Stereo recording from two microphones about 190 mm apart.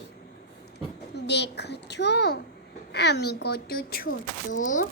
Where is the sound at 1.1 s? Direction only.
65° left (ahead or behind).